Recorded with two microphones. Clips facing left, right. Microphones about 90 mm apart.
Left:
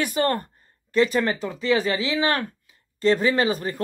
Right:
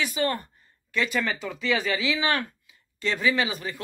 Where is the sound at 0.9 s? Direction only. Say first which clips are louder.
Left 6 dB; 35° left (ahead or behind).